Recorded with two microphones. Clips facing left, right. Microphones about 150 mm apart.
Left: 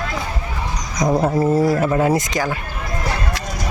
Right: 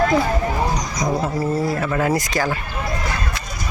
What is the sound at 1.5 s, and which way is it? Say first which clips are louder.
Speech: left 5 dB; 20° left (ahead or behind).